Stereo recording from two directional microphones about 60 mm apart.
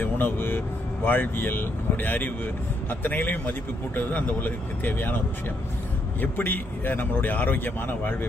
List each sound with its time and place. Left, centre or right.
0.0 s speech: left
6.2 s speech: left